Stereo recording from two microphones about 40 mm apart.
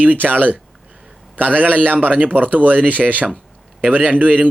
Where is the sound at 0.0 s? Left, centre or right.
Right.